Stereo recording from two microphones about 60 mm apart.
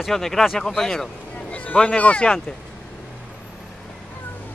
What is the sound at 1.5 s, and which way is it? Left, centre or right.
Speech, centre.